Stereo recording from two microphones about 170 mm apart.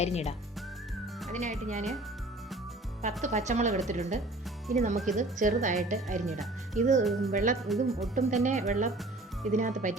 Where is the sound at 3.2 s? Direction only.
45° right (ahead or behind).